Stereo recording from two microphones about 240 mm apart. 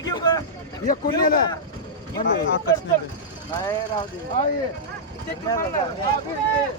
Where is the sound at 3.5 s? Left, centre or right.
Centre.